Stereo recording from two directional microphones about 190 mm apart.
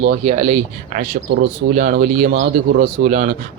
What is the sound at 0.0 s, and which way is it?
Speech, 35° right (ahead or behind).